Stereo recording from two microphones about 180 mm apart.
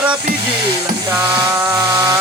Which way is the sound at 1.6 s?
20° right (ahead or behind).